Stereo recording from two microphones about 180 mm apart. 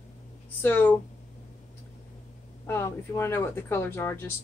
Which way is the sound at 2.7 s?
15° left (ahead or behind).